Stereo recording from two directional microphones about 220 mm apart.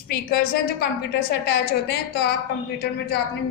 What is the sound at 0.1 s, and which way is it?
A woman's voice, 45° left (ahead or behind).